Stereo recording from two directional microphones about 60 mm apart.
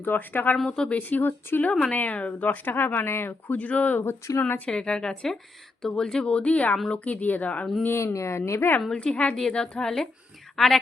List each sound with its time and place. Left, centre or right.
0.0 s speech: left
4.6 s speech: centre
7.9 s a woman's voice: left
9.1 s speech: centre